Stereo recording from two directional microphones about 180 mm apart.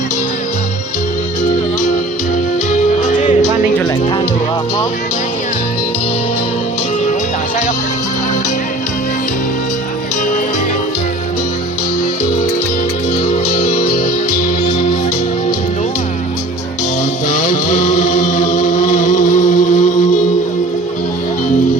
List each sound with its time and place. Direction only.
2.7 s music: 45° left (ahead or behind)
17.2 s chant: 50° left (ahead or behind)